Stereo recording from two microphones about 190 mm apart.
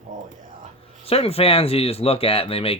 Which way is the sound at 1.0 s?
30° left (ahead or behind).